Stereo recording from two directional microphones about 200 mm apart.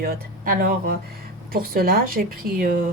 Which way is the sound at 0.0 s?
45° right (ahead or behind).